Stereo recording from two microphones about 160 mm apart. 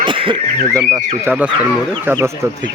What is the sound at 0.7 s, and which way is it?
Speech, 20° right (ahead or behind).